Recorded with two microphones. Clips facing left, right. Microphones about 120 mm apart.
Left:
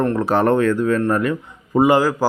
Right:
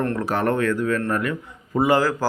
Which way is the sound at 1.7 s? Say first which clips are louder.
Left 4 dB; 15° left (ahead or behind).